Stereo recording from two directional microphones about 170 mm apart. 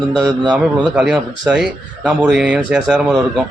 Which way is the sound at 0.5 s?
5° right (ahead or behind).